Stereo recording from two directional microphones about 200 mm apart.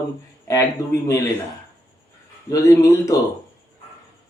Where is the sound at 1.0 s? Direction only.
15° left (ahead or behind).